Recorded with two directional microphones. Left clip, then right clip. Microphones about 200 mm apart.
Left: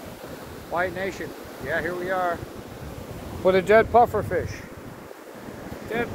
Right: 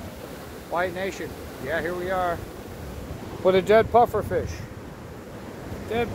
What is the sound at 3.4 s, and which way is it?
Speech, 10° right (ahead or behind).